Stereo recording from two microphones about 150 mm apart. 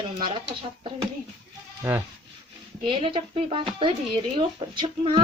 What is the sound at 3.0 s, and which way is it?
Speech, 35° right (ahead or behind).